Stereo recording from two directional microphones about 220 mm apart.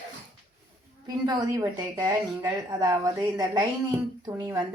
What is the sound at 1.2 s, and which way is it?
Speech, 15° right (ahead or behind).